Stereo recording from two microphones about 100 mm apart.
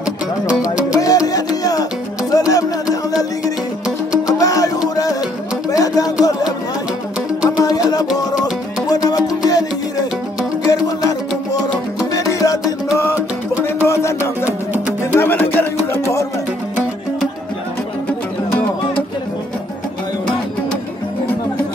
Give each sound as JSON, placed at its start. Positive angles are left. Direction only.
{"t": 0.5, "sound": "music", "side_deg": -10}
{"t": 0.9, "sound": "music", "side_deg": 35}
{"t": 7.4, "sound": "music", "side_deg": 40}
{"t": 13.8, "sound": "music", "side_deg": 30}
{"t": 14.4, "sound": "music", "side_deg": -20}
{"t": 15.1, "sound": "music", "side_deg": 20}